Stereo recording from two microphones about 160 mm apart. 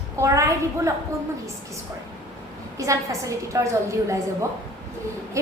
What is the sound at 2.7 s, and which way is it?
A woman's voice, 20° right (ahead or behind).